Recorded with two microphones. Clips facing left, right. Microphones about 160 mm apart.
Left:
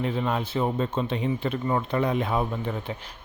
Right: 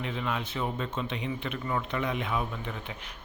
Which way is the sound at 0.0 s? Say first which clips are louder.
Left 6 dB; 35° left (ahead or behind).